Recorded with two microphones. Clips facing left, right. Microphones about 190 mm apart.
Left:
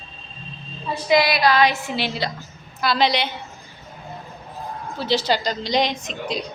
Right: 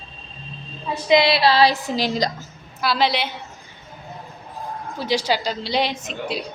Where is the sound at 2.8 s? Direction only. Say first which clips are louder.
Left 1 dB; 5° right (ahead or behind).